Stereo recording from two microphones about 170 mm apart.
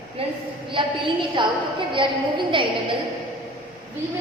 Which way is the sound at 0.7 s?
30° right (ahead or behind).